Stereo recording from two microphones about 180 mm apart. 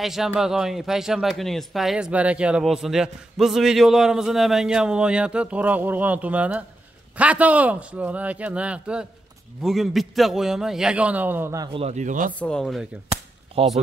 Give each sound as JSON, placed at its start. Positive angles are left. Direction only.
{"t": 0.0, "sound": "a man's voice", "side_deg": 0}
{"t": 11.7, "sound": "speech", "side_deg": -35}
{"t": 12.4, "sound": "a man's voice", "side_deg": 5}
{"t": 13.6, "sound": "speech", "side_deg": -35}